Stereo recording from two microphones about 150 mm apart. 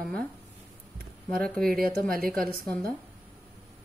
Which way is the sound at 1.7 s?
75° right (ahead or behind).